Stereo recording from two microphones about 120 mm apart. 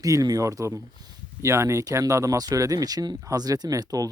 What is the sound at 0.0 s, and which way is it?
Speech, 30° right (ahead or behind).